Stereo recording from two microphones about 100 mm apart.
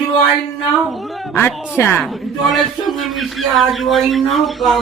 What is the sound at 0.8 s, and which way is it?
Speech, centre (ahead or behind).